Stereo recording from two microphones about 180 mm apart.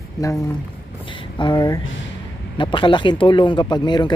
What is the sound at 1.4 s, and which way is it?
Speech, 20° left (ahead or behind).